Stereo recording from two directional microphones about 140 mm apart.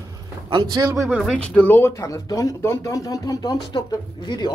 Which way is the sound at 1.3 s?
10° left (ahead or behind).